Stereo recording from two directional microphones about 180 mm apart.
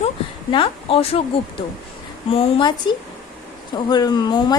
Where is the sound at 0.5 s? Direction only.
30° left (ahead or behind).